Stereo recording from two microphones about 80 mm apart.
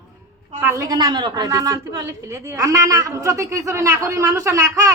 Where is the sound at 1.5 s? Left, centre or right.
Right.